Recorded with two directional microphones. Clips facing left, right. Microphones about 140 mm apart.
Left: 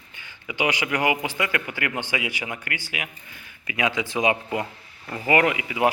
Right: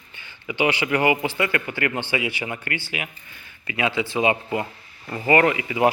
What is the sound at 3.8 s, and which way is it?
Speech, 15° left (ahead or behind).